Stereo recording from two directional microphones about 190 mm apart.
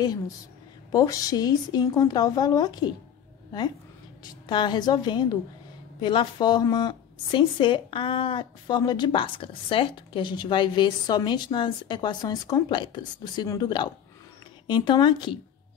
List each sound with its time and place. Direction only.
0.9 s speech: 20° left (ahead or behind)
4.2 s speech: 25° left (ahead or behind)